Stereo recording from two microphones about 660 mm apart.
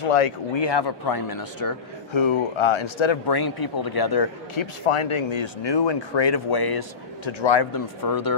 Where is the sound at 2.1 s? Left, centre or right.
Left.